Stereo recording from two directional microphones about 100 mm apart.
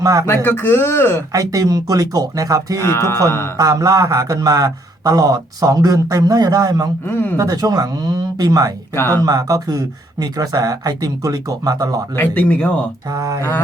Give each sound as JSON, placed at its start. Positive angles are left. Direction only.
{"t": 0.0, "sound": "speech", "side_deg": -35}
{"t": 0.3, "sound": "speech", "side_deg": 20}
{"t": 1.3, "sound": "speech", "side_deg": -35}
{"t": 2.7, "sound": "speech", "side_deg": 25}
{"t": 3.6, "sound": "speech", "side_deg": -35}
{"t": 7.0, "sound": "speech", "side_deg": 20}
{"t": 7.3, "sound": "speech", "side_deg": -40}
{"t": 12.1, "sound": "speech", "side_deg": 20}
{"t": 13.1, "sound": "speech", "side_deg": -35}